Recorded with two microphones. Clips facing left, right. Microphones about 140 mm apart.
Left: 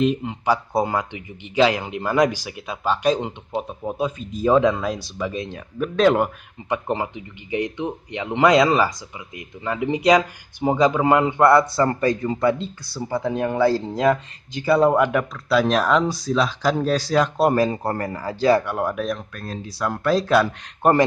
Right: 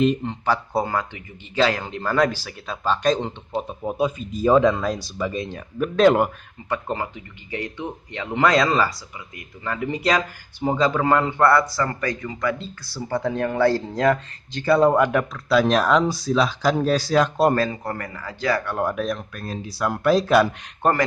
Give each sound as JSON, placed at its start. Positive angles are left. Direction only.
{"t": 0.0, "sound": "speech", "side_deg": 5}
{"t": 3.8, "sound": "speech", "side_deg": -5}
{"t": 6.7, "sound": "speech", "side_deg": 20}
{"t": 12.8, "sound": "speech", "side_deg": 10}
{"t": 17.6, "sound": "a man's voice", "side_deg": 30}
{"t": 18.8, "sound": "speech", "side_deg": 0}
{"t": 20.8, "sound": "speech", "side_deg": 10}